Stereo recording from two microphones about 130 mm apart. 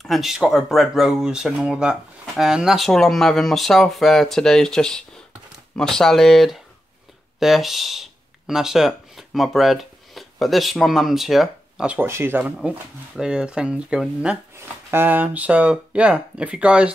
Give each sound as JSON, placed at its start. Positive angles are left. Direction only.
{"t": 0.0, "sound": "speech", "side_deg": 0}